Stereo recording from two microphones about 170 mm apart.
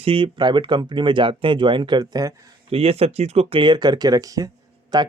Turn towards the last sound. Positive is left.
turn(degrees=-25)  # may be behind; listen again after turning